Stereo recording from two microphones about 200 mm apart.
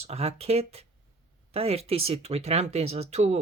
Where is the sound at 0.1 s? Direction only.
30° right (ahead or behind).